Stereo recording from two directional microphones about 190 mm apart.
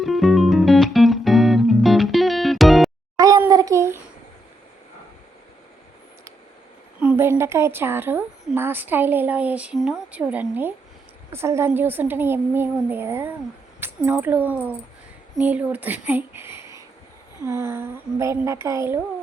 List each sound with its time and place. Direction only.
0.0 s music: centre (ahead or behind)
3.2 s a sound: 20° right (ahead or behind)
7.0 s a woman's voice: 10° right (ahead or behind)